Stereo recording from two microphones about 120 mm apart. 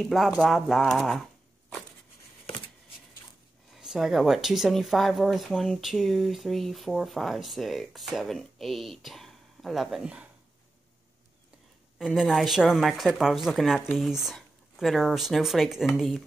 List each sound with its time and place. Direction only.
0.0 s speech: 5° right (ahead or behind)
3.7 s speech: 5° right (ahead or behind)
12.0 s speech: centre (ahead or behind)